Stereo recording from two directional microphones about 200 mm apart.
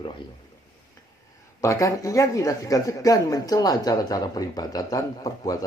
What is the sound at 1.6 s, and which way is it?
Speech, 15° left (ahead or behind).